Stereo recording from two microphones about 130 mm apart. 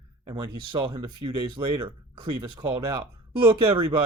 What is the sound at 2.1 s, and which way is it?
Speech, 35° right (ahead or behind).